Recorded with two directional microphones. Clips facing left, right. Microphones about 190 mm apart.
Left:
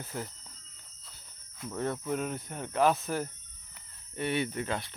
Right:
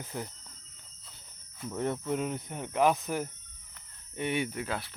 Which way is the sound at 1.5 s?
5° right (ahead or behind).